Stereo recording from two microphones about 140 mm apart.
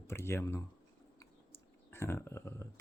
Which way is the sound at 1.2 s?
15° left (ahead or behind).